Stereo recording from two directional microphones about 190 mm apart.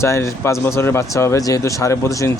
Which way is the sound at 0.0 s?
15° left (ahead or behind).